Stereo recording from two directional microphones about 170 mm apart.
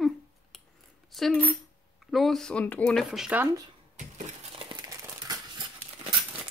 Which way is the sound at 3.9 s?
40° right (ahead or behind).